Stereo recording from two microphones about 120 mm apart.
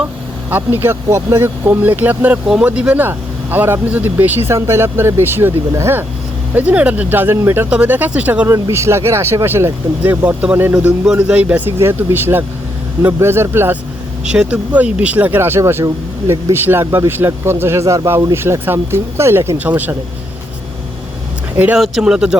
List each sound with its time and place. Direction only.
0.5 s speech: 15° right (ahead or behind)
8.4 s speech: 25° right (ahead or behind)
21.8 s speech: 5° right (ahead or behind)